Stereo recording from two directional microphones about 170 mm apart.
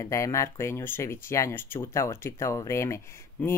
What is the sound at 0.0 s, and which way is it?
Speech, 15° left (ahead or behind).